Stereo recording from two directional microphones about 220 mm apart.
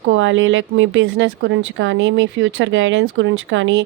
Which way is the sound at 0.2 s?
60° right (ahead or behind).